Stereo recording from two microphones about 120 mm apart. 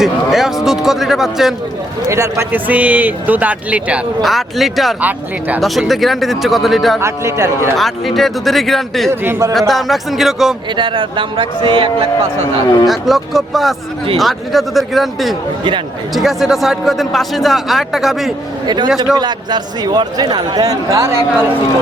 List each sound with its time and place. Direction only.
0.0 s a man's voice: 5° right (ahead or behind)
2.0 s speech: 25° right (ahead or behind)
4.2 s a man's voice: centre (ahead or behind)
4.9 s speech: 15° right (ahead or behind)
5.5 s a man's voice: centre (ahead or behind)
7.0 s a man's voice: 25° right (ahead or behind)
7.8 s a man's voice: centre (ahead or behind)
9.2 s a man's voice: 20° right (ahead or behind)
9.5 s a man's voice: centre (ahead or behind)
10.8 s a man's voice: 45° right (ahead or behind)
12.9 s a man's voice: centre (ahead or behind)
18.6 s a man's voice: 35° right (ahead or behind)